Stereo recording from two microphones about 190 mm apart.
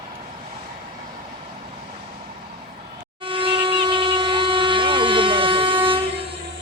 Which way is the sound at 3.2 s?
30° right (ahead or behind).